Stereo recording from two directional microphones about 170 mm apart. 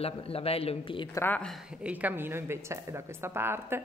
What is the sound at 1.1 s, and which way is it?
Speech, 10° left (ahead or behind).